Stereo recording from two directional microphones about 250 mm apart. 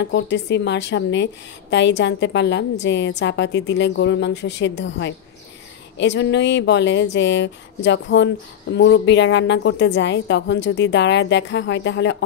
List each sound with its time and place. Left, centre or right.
0.0 s a woman's voice: left